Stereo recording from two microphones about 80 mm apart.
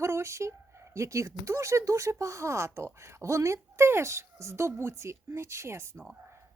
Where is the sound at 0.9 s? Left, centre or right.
Right.